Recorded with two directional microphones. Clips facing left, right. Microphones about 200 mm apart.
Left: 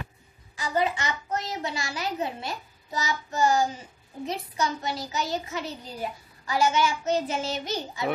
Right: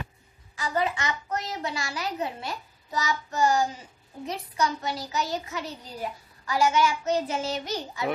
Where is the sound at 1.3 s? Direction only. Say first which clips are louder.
Left 1 dB; 25° left (ahead or behind).